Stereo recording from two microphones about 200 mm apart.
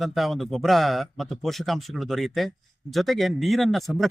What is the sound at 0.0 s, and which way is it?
Speech, centre (ahead or behind).